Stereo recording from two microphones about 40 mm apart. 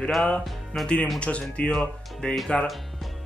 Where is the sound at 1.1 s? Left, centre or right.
Left.